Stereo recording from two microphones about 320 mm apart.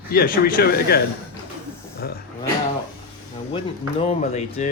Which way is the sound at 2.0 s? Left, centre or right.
Left.